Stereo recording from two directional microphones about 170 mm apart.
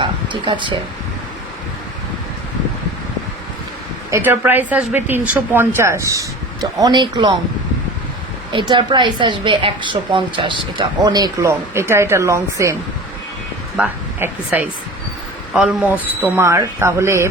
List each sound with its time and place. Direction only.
0.0 s a sound: 30° right (ahead or behind)
4.1 s a woman's voice: 10° right (ahead or behind)
8.5 s a woman's voice: 25° right (ahead or behind)
13.7 s a woman's voice: 10° right (ahead or behind)